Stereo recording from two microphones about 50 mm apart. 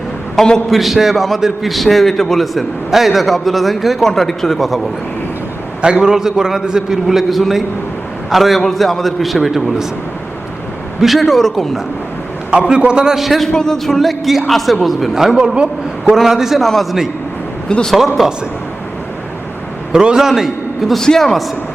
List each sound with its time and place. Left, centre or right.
0.4 s a man's voice: centre
5.8 s a man's voice: centre
11.0 s a man's voice: centre
12.5 s a man's voice: centre
13.1 s a man's voice: centre
13.5 s a man's voice: centre
17.7 s a man's voice: centre
18.2 s a man's voice: centre
19.9 s a man's voice: centre
21.0 s a man's voice: centre